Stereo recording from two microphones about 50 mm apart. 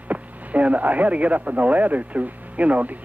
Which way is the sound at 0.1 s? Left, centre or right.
Right.